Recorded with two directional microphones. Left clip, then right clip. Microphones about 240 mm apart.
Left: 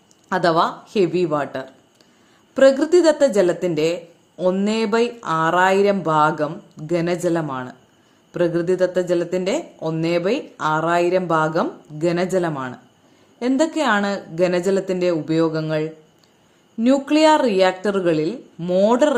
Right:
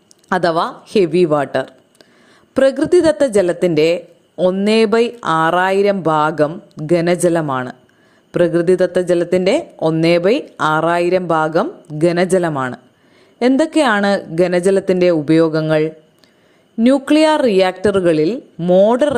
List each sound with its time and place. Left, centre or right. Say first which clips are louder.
0.3 s speech: right 2 dB; right